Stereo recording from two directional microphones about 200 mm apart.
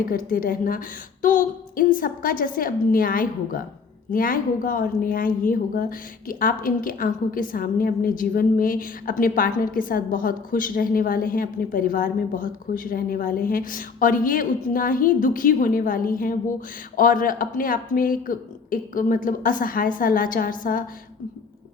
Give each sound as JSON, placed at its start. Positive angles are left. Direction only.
{"t": 0.0, "sound": "a woman's voice", "side_deg": 45}